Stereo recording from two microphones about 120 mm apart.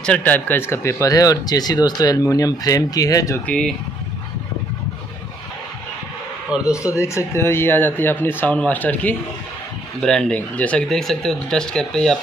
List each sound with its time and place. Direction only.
0.0 s speech: 10° left (ahead or behind); by 3.3 s 30° left (ahead or behind)
3.4 s speech: 5° left (ahead or behind)
6.7 s speech: 25° left (ahead or behind); by 12.2 s 5° left (ahead or behind)